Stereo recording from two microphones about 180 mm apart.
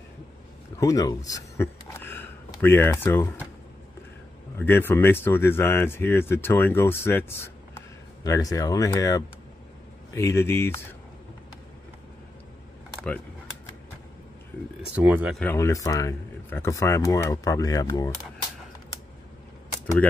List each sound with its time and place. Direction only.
0.7 s speech: 20° left (ahead or behind)
4.6 s speech: 10° left (ahead or behind)
15.0 s speech: 10° right (ahead or behind)
15.4 s speech: 15° left (ahead or behind)